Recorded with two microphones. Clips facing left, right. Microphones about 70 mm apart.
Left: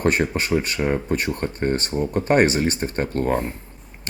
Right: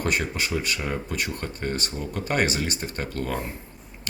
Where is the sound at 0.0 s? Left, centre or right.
Left.